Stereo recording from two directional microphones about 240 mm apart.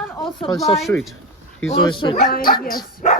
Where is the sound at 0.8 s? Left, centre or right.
Centre.